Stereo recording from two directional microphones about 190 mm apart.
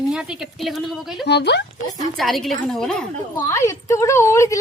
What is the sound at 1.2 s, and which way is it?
Speech, 60° left (ahead or behind).